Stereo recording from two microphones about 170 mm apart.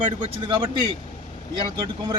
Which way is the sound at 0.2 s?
30° right (ahead or behind).